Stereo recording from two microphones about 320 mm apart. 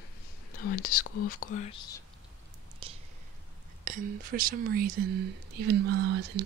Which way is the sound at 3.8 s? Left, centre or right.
Right.